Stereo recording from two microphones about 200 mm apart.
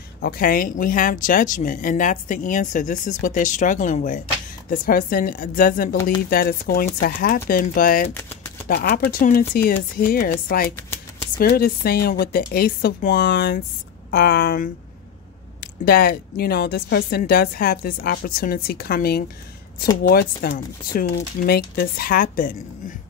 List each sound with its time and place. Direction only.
0.2 s a woman's voice: 45° left (ahead or behind)
15.8 s a woman's voice: 50° left (ahead or behind)